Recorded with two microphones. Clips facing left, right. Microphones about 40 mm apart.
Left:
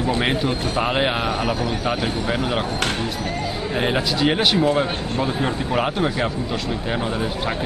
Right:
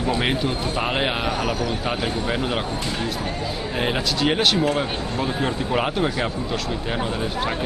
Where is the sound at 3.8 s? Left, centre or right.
Centre.